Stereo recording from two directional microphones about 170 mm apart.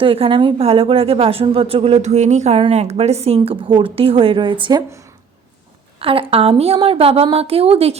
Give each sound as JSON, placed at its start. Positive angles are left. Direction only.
{"t": 0.0, "sound": "a woman's voice", "side_deg": -30}
{"t": 6.0, "sound": "a woman's voice", "side_deg": -35}